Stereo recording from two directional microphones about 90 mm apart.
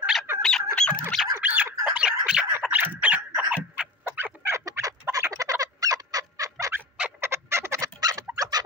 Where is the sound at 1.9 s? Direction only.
10° right (ahead or behind).